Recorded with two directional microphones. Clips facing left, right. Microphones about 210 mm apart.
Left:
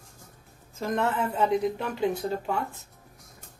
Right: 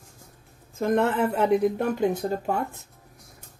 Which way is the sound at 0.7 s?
55° right (ahead or behind).